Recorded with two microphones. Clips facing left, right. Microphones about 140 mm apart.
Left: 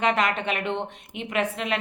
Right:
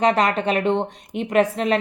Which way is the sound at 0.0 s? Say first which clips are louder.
Right 5 dB; 35° right (ahead or behind).